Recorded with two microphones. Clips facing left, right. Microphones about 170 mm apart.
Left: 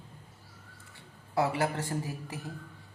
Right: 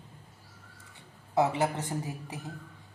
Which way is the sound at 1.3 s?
20° right (ahead or behind).